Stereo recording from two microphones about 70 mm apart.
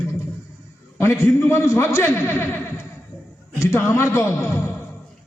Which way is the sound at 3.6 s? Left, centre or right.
Left.